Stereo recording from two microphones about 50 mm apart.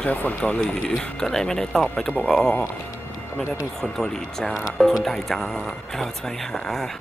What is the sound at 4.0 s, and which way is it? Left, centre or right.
Speech, centre.